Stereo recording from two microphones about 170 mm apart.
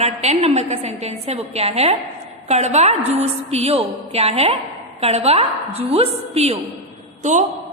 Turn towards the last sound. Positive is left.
turn(degrees=-45)  # may be behind; listen again after turning